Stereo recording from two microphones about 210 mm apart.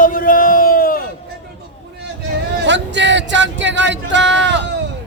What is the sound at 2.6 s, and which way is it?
Speech, 55° right (ahead or behind).